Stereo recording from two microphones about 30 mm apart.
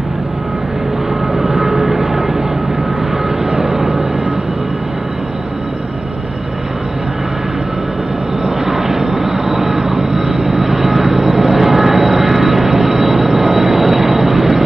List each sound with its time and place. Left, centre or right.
1.3 s vehicle: centre
3.4 s vehicle: right
8.5 s vehicle: centre